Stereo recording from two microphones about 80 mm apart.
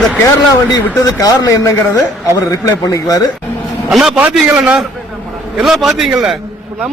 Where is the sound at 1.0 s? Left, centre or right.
Left.